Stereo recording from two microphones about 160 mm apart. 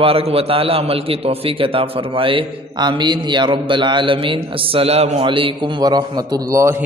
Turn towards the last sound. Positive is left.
turn(degrees=-20)  # may be behind; listen again after turning